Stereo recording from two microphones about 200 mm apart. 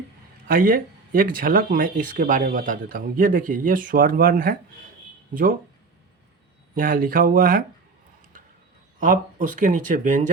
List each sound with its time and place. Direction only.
0.4 s speech: 45° right (ahead or behind)
6.7 s speech: 45° right (ahead or behind)
9.0 s speech: 40° right (ahead or behind)